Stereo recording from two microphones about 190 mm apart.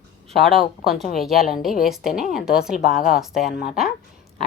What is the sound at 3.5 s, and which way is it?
Speech, 50° left (ahead or behind).